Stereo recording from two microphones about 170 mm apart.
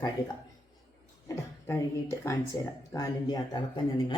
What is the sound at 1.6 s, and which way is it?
Speech, 15° left (ahead or behind).